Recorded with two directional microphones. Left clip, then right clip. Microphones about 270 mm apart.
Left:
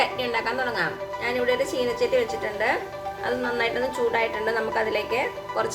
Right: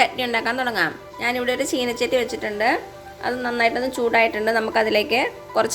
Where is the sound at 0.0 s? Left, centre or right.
Right.